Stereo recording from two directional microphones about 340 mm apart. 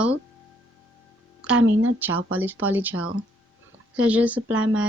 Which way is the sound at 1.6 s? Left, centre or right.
Right.